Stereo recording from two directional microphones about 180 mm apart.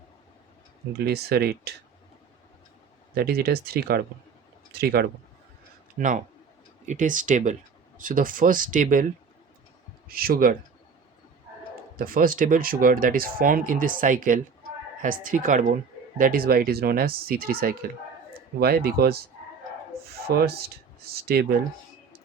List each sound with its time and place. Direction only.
0.9 s speech: 65° right (ahead or behind)
3.2 s speech: 60° right (ahead or behind)
6.0 s speech: 45° right (ahead or behind)
11.9 s speech: 50° right (ahead or behind)
20.2 s speech: 60° right (ahead or behind)